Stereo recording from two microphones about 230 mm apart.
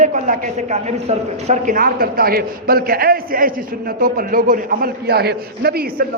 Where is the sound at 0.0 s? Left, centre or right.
Right.